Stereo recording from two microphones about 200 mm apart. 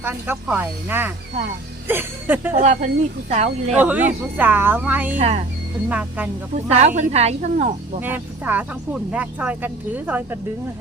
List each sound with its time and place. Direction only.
0.0 s speech: 10° right (ahead or behind)
2.6 s a woman's voice: 35° right (ahead or behind)
3.8 s speech: 10° right (ahead or behind)
5.1 s a woman's voice: 35° right (ahead or behind)
5.9 s speech: 5° right (ahead or behind)
6.7 s a woman's voice: 35° right (ahead or behind)
8.0 s speech: 10° right (ahead or behind)